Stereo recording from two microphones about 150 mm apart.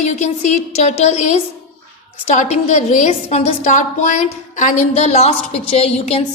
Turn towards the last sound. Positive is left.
turn(degrees=45)  # may be behind; listen again after turning